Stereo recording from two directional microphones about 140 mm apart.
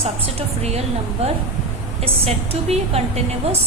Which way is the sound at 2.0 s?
45° right (ahead or behind).